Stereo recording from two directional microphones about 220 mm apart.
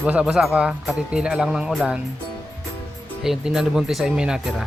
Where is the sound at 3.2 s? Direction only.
Centre (ahead or behind).